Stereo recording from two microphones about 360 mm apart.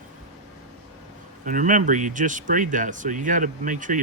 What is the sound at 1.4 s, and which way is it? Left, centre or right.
Speech, right.